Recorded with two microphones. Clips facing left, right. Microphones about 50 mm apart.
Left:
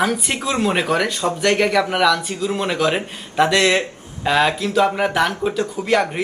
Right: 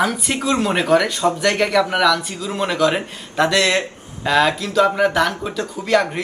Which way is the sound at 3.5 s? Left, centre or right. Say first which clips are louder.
Left 1 dB; centre.